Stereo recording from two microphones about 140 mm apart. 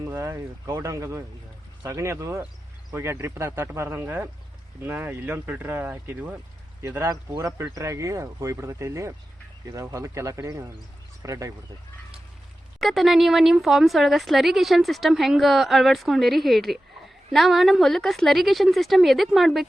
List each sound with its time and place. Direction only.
0.0 s speech: 25° right (ahead or behind)
12.8 s speech: centre (ahead or behind)